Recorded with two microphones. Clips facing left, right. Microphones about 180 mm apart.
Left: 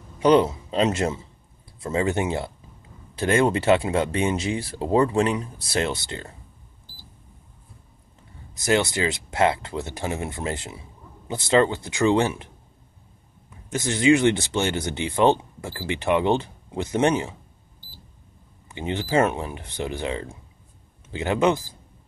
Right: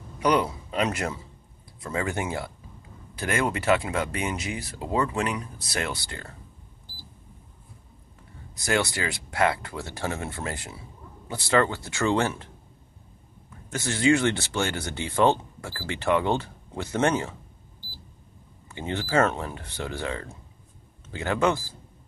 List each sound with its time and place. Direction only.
0.2 s speech: 25° left (ahead or behind)
8.5 s speech: 20° left (ahead or behind)
13.5 s speech: 20° left (ahead or behind)
18.7 s speech: 20° left (ahead or behind)